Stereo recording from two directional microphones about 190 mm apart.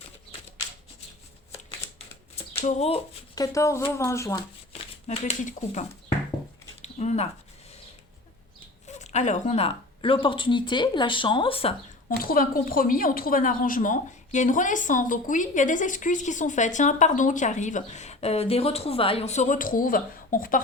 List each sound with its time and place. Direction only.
2.6 s a woman's voice: 35° left (ahead or behind)
3.3 s speech: 20° left (ahead or behind)
4.7 s speech: 35° left (ahead or behind)
6.8 s a sound: 35° left (ahead or behind)
8.9 s speech: 35° left (ahead or behind)
12.0 s a woman's voice: 50° left (ahead or behind)